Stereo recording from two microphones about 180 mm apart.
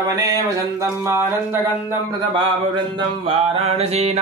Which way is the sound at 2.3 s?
25° right (ahead or behind).